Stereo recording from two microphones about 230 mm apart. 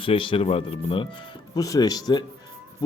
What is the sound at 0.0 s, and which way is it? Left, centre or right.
A man's voice, left.